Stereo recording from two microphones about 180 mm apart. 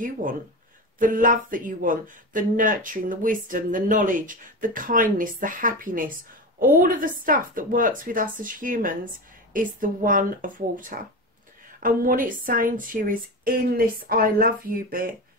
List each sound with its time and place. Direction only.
0.0 s speech: 50° right (ahead or behind)